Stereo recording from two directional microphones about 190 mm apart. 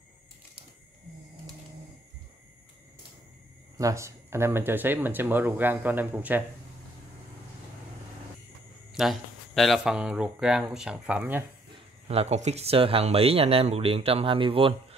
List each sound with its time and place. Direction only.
3.7 s speech: 15° right (ahead or behind)
8.9 s speech: centre (ahead or behind)
12.1 s speech: 35° right (ahead or behind)